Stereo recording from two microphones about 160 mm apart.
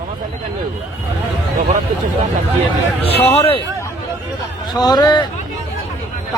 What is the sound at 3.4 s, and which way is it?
Speech, 35° left (ahead or behind).